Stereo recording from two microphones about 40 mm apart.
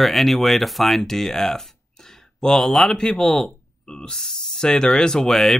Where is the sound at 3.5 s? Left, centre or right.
Left.